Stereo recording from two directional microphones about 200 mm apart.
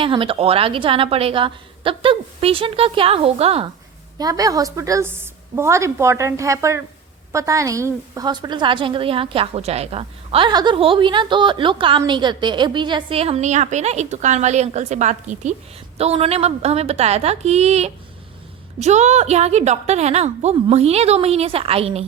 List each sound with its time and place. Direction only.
0.0 s a woman's voice: 25° right (ahead or behind)
4.2 s a woman's voice: 20° right (ahead or behind)